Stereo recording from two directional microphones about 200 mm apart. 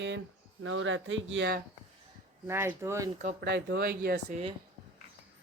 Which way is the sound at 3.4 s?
55° right (ahead or behind).